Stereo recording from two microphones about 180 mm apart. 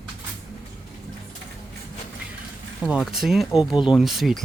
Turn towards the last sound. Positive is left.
turn(degrees=0)  # may be behind; listen again after turning